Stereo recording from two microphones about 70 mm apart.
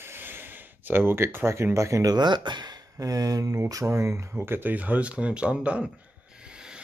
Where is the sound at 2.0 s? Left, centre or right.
Right; by 5.8 s centre.